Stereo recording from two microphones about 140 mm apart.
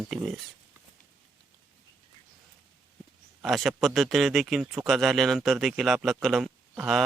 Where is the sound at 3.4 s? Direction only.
Centre (ahead or behind).